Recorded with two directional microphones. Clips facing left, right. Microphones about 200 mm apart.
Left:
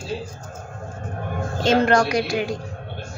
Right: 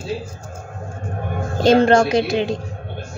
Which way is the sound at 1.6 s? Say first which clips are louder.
Right 5 dB; 30° right (ahead or behind).